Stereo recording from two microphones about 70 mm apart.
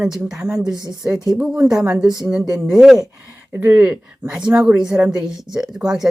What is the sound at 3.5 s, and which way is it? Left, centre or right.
Speech, right.